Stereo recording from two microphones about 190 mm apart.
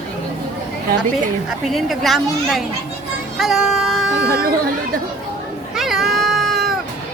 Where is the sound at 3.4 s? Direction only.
Centre (ahead or behind).